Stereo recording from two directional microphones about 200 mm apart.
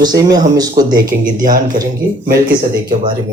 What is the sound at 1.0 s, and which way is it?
Speech, 45° right (ahead or behind).